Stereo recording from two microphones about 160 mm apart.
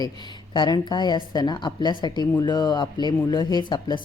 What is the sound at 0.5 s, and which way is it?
Speech, 25° left (ahead or behind).